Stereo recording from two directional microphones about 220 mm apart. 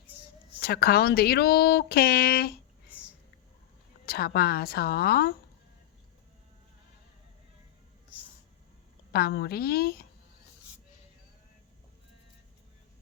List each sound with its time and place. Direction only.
0.6 s speech: 45° left (ahead or behind)
4.0 s speech: 45° left (ahead or behind)
9.1 s speech: 45° left (ahead or behind)